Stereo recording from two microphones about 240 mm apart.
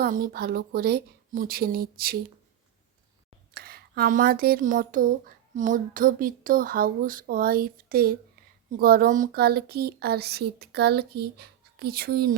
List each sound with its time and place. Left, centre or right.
0.0 s speech: right
3.5 s speech: right